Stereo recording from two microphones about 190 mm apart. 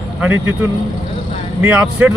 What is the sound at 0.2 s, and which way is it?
Speech, 10° right (ahead or behind).